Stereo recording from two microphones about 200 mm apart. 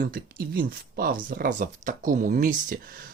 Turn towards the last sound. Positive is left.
turn(degrees=-45)  # may be behind; listen again after turning